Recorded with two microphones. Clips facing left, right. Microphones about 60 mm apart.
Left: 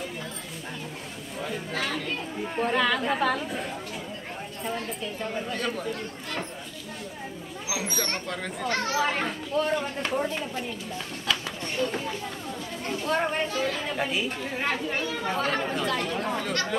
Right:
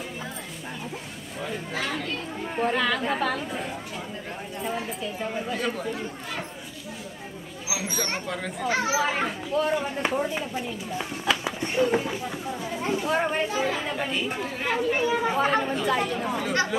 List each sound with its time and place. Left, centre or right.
1.4 s a child's voice: centre
7.6 s a child's voice: centre
11.0 s a sound: centre
12.8 s speech: centre
13.9 s a child's voice: centre
14.7 s a child's voice: centre